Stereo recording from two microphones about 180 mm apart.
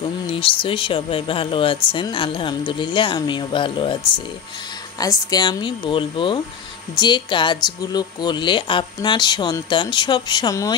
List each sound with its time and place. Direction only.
0.3 s a woman's voice: 30° left (ahead or behind)